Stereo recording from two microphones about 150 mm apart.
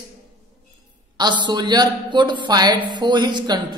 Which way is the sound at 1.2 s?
30° right (ahead or behind).